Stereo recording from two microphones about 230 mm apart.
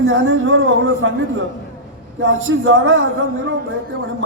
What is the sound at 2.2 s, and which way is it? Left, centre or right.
Speech, right.